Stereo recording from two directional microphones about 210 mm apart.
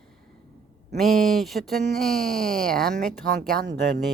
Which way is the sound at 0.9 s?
Centre (ahead or behind).